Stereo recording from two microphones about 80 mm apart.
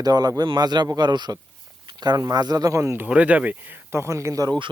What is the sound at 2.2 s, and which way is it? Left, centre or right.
Speech, right.